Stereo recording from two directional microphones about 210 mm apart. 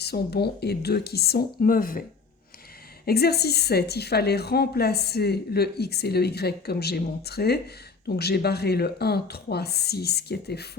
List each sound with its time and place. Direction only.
0.0 s speech: 50° left (ahead or behind)
3.1 s speech: 50° left (ahead or behind)